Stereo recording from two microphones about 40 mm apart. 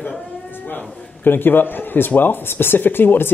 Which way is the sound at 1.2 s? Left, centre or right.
Left.